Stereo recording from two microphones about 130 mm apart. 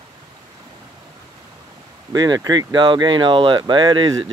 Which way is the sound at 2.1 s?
30° right (ahead or behind).